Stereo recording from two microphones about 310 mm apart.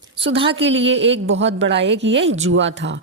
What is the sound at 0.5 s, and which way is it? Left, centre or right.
A woman's voice, right.